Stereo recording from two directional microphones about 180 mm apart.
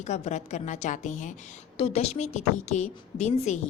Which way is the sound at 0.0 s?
40° left (ahead or behind).